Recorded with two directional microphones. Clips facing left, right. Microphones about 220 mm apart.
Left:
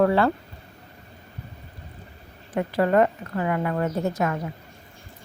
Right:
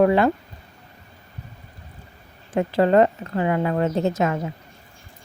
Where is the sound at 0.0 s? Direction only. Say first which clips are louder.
Right 3 dB; 15° right (ahead or behind).